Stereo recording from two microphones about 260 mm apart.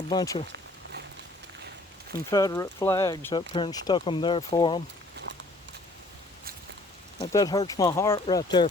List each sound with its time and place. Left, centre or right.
0.1 s speech: centre
2.1 s speech: centre
5.3 s a sound: right
7.2 s speech: centre